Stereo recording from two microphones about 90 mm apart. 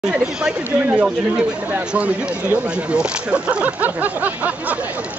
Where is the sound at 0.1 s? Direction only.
10° right (ahead or behind).